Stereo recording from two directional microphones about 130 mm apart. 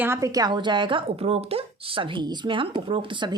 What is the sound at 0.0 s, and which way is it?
A woman's voice, 20° right (ahead or behind).